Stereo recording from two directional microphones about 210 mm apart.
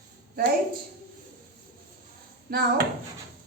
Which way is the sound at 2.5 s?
45° right (ahead or behind).